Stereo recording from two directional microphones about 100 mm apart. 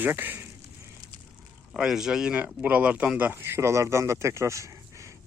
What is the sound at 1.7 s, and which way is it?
Speech, 5° right (ahead or behind).